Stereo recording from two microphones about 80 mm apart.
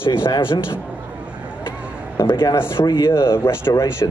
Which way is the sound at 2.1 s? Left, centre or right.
Left.